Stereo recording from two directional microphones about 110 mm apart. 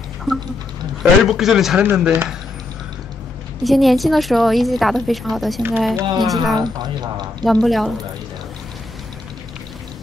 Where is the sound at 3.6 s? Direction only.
Centre (ahead or behind).